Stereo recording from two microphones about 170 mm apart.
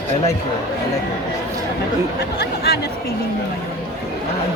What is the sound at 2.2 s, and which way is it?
Speech, 70° left (ahead or behind).